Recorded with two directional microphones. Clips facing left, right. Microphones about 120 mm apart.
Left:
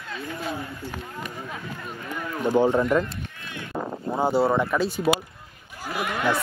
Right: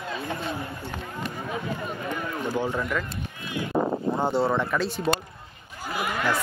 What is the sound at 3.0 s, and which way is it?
Run, 5° right (ahead or behind).